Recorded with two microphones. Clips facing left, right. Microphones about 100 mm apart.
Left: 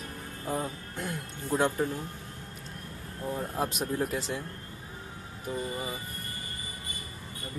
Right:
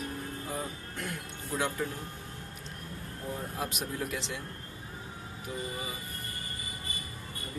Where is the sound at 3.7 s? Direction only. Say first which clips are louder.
Left 5 dB; 40° left (ahead or behind).